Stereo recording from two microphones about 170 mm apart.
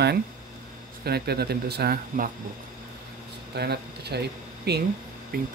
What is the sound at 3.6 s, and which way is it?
Speech, 75° right (ahead or behind).